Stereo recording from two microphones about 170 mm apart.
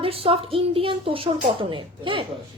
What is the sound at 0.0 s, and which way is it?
A woman's voice, 35° right (ahead or behind).